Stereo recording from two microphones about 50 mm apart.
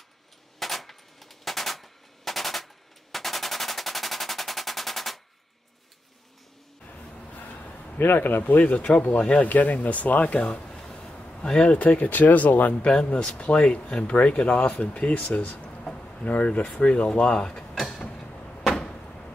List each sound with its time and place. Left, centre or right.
0.6 s machine gun: centre
6.9 s a sound: left
8.0 s speech: left
9.5 s speech: left
10.7 s speech: centre; by 12.8 s left
13.1 s speech: left
15.8 s a sound: centre
16.3 s speech: left
17.7 s mechanisms: centre
18.1 s a sound: centre